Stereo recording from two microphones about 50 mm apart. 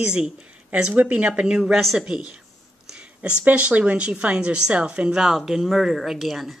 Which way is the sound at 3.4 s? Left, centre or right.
Right.